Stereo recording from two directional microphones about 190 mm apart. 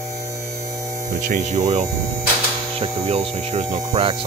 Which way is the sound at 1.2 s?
40° right (ahead or behind).